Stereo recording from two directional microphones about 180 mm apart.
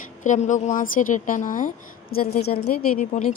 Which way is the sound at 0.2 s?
45° left (ahead or behind).